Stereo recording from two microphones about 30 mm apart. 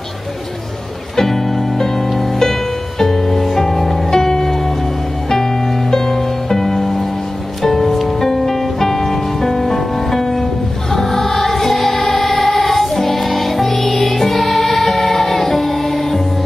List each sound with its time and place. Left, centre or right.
1.1 s music: centre
4.1 s music: centre
7.9 s music: centre
8.3 s music: centre
10.9 s choir: centre